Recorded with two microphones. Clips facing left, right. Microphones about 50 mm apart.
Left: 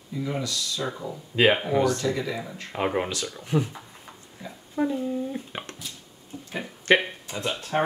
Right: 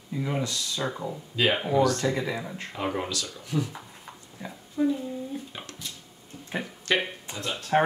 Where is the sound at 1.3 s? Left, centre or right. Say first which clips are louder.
Left 3 dB; left.